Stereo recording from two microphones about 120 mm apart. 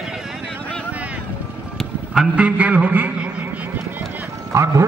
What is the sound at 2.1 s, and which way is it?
A man's voice, 10° right (ahead or behind).